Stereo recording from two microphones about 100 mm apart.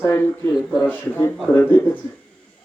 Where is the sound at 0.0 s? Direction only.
20° left (ahead or behind).